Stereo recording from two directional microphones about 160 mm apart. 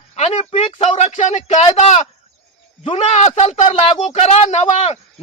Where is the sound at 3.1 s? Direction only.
45° left (ahead or behind).